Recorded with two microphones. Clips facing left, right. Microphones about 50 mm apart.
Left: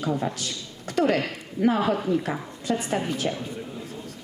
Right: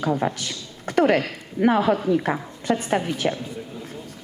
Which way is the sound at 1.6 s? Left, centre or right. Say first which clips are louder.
Right 3 dB; right.